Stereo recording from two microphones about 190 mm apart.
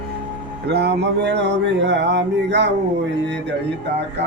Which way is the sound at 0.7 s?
60° right (ahead or behind).